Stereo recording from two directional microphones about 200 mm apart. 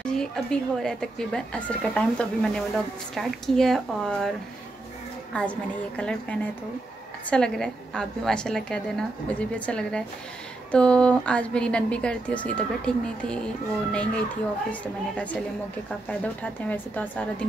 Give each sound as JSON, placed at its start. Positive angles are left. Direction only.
{"t": 0.0, "sound": "a woman's voice", "side_deg": 5}
{"t": 5.3, "sound": "a woman's voice", "side_deg": 5}